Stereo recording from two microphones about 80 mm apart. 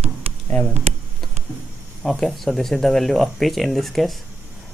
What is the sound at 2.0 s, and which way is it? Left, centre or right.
Speech, centre.